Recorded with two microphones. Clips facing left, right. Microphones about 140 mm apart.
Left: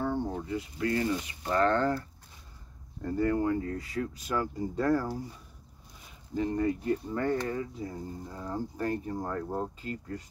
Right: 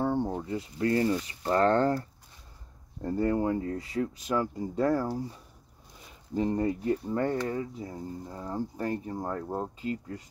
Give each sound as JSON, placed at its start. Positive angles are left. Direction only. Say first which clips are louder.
{"t": 0.0, "sound": "speech", "louder": "right 3 dB", "side_deg": -25}
{"t": 6.3, "sound": "speech", "louder": "right 1 dB", "side_deg": -30}